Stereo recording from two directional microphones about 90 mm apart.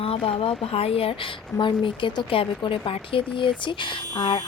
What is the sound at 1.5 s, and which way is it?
Speech, 65° left (ahead or behind).